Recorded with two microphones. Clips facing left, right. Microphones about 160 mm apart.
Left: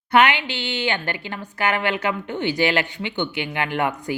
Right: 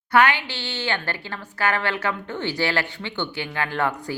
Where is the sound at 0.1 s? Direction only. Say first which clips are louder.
Left 2 dB; 20° left (ahead or behind).